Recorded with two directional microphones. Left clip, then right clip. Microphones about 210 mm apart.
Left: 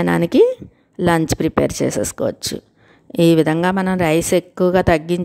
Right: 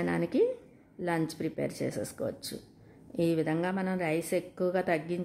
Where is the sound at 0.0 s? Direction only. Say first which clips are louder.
Left 14 dB; 45° left (ahead or behind).